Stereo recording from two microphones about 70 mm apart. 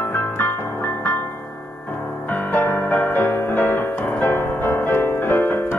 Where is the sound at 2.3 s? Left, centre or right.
Left.